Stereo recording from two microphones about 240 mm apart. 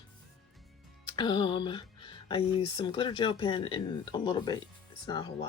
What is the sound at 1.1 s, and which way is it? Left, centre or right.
Speech, centre.